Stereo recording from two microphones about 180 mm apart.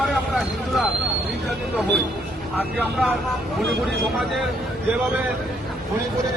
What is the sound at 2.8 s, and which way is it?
Speech, centre (ahead or behind).